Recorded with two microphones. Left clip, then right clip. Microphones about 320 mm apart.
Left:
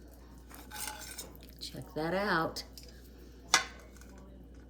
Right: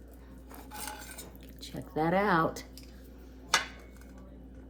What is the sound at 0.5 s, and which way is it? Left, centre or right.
Stir, centre.